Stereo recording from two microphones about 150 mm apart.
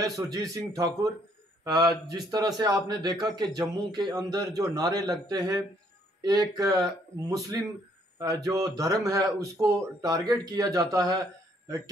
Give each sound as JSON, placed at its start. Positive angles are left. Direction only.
{"t": 0.1, "sound": "speech", "side_deg": -25}